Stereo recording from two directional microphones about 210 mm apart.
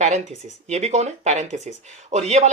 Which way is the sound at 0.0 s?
35° right (ahead or behind).